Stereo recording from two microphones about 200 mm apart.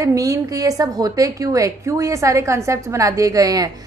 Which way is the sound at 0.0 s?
15° right (ahead or behind).